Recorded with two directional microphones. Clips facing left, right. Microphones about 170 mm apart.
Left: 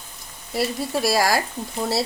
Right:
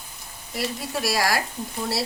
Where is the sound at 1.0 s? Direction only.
25° left (ahead or behind).